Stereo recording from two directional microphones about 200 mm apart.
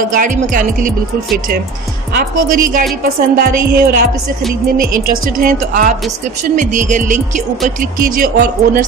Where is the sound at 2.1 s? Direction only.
45° right (ahead or behind).